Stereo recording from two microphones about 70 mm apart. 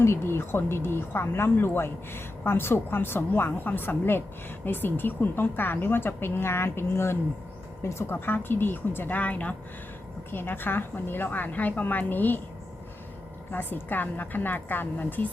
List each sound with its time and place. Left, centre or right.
0.0 s a woman's voice: left
13.5 s a woman's voice: left